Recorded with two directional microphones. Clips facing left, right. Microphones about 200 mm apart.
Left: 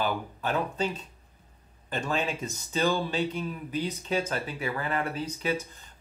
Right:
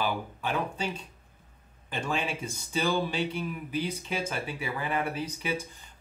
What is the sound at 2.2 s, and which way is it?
Speech, 10° right (ahead or behind).